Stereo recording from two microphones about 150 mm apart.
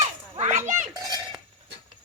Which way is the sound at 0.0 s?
50° right (ahead or behind).